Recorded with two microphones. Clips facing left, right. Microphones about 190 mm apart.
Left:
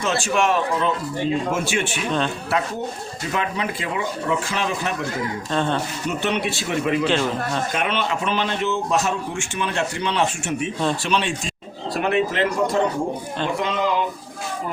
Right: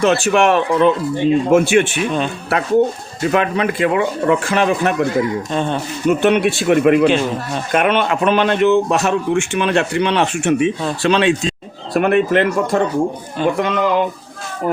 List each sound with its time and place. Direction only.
0.0 s a man's voice: 65° right (ahead or behind)
5.5 s speech: 15° right (ahead or behind)
6.1 s a man's voice: 55° right (ahead or behind)
7.1 s speech: 15° right (ahead or behind)
7.7 s a man's voice: 60° right (ahead or behind)
11.0 s speech: 90° right
11.9 s a man's voice: 55° right (ahead or behind)